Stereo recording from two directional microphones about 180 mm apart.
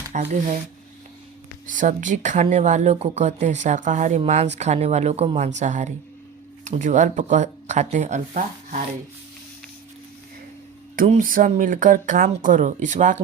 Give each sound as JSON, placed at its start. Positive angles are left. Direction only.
{"t": 0.1, "sound": "speech", "side_deg": -45}
{"t": 1.6, "sound": "speech", "side_deg": -45}
{"t": 11.1, "sound": "speech", "side_deg": -50}